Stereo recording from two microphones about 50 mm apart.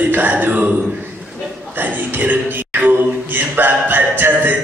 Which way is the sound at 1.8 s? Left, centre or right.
Right.